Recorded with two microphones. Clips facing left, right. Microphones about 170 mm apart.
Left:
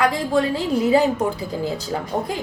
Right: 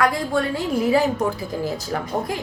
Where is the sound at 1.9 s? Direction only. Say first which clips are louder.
Even; 20° left (ahead or behind).